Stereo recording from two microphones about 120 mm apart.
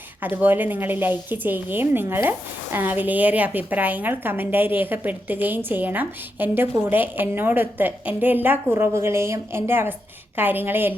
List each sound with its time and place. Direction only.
0.2 s a woman's voice: 15° right (ahead or behind)